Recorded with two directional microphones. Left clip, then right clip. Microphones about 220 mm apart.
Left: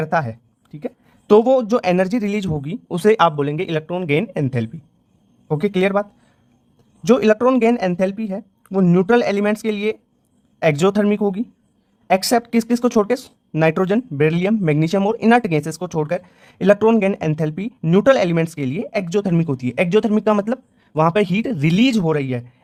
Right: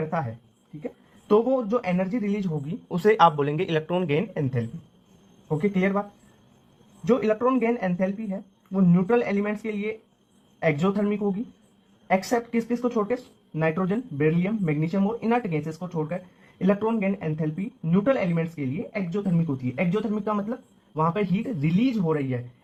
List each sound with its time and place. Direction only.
0.1 s speech: 35° left (ahead or behind)